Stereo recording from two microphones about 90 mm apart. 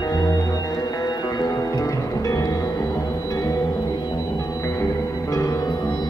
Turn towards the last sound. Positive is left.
turn(degrees=40)  # may be behind; listen again after turning